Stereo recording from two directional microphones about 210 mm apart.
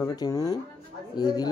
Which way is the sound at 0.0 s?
15° left (ahead or behind).